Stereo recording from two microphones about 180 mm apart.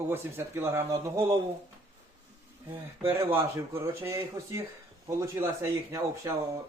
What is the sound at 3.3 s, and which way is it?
Speech, 15° right (ahead or behind).